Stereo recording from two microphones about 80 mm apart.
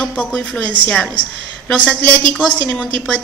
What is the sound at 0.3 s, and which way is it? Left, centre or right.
A woman's voice, centre.